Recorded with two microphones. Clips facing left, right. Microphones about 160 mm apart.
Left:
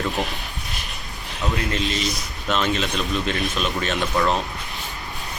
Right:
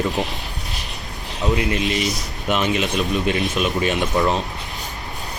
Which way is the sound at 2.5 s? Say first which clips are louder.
Right 2 dB; 15° right (ahead or behind).